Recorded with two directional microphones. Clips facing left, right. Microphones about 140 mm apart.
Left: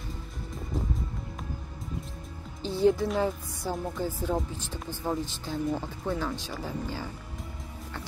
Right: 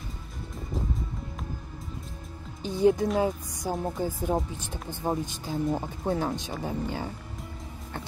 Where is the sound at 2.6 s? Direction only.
15° right (ahead or behind).